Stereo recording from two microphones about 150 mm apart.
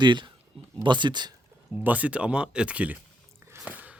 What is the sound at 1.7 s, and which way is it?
Speech, 10° right (ahead or behind).